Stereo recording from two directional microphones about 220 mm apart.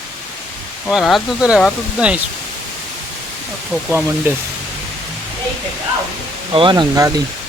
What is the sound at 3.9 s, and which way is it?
Speech, 10° right (ahead or behind).